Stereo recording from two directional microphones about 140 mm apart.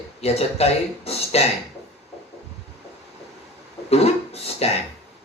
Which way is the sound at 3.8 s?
45° left (ahead or behind).